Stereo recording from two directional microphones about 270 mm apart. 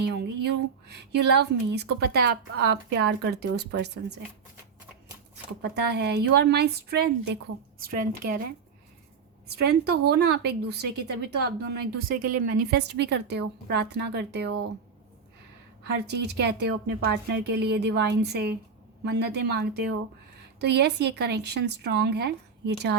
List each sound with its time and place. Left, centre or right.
0.0 s speech: right
3.5 s speech: right
3.8 s speech: right
5.6 s speech: right
9.6 s speech: right
16.0 s speech: right